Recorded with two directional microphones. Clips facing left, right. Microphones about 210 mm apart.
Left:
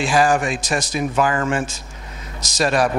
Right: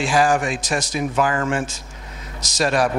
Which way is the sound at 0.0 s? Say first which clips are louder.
Left 1 dB; 5° left (ahead or behind).